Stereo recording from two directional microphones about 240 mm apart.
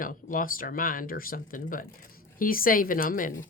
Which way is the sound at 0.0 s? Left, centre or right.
Left.